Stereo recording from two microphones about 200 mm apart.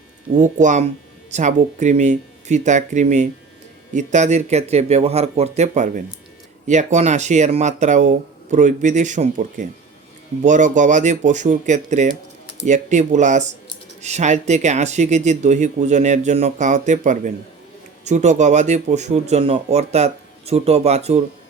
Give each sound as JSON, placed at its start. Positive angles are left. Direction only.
{"t": 0.3, "sound": "speech", "side_deg": -40}